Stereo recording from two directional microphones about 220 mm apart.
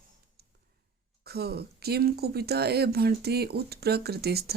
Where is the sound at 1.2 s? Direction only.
45° right (ahead or behind).